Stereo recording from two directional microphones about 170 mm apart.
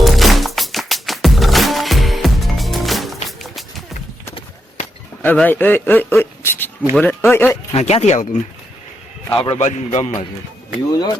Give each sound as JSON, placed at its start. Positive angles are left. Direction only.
{"t": 0.0, "sound": "music", "side_deg": 0}
{"t": 3.2, "sound": "run", "side_deg": 0}
{"t": 5.2, "sound": "a man's voice", "side_deg": 10}
{"t": 7.7, "sound": "a man's voice", "side_deg": 35}
{"t": 10.9, "sound": "speech", "side_deg": 25}